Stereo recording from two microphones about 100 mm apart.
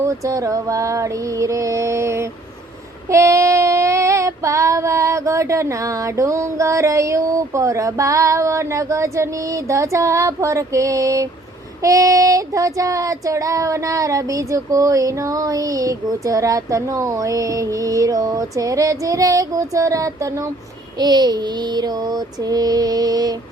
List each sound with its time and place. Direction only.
0.0 s child singing: 35° right (ahead or behind)
21.0 s child singing: 45° right (ahead or behind)